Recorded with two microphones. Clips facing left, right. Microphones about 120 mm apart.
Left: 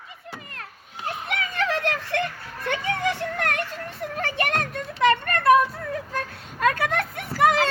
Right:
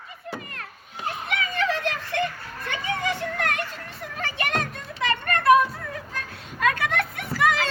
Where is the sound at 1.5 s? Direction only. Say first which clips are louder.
Left 1 dB; 65° left (ahead or behind).